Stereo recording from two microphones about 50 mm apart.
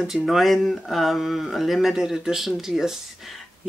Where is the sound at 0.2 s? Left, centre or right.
Centre.